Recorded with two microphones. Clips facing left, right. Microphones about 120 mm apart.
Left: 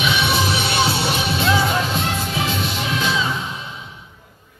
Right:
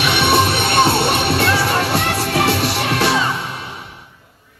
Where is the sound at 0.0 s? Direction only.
65° right (ahead or behind).